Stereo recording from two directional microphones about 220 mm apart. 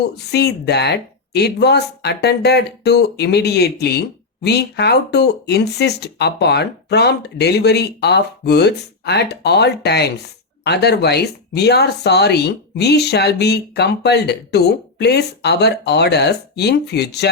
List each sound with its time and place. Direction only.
0.3 s speech: 50° left (ahead or behind)